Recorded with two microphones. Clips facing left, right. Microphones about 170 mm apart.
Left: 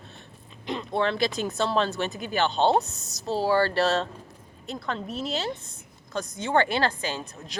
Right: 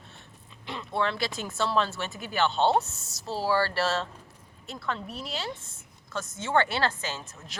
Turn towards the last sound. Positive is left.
turn(degrees=15)  # may be behind; listen again after turning